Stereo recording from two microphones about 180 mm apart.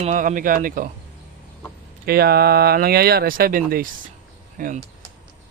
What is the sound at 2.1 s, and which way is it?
Speech, 60° right (ahead or behind).